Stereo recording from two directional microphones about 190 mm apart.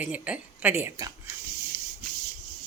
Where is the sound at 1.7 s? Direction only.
55° right (ahead or behind).